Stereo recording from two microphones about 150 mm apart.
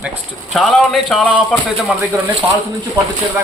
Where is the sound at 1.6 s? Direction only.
10° right (ahead or behind).